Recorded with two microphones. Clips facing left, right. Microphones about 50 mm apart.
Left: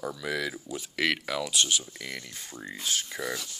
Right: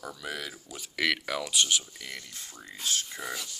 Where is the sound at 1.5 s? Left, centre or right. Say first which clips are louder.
Right 1 dB; centre.